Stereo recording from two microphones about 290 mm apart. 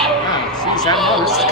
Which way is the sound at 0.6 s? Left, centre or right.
Centre.